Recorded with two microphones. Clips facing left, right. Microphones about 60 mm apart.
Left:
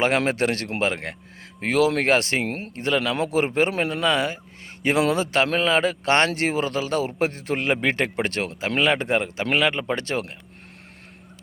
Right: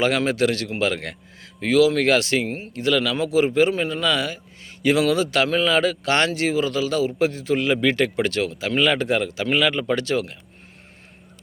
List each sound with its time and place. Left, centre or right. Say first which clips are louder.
0.3 s speech: right 2 dB; left
3.7 s speech: right 1 dB; left
4.0 s speech: left 1 dB; left